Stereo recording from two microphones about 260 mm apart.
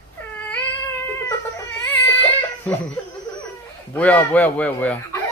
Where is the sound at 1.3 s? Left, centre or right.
Centre.